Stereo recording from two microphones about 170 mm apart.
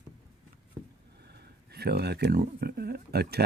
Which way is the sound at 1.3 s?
70° right (ahead or behind).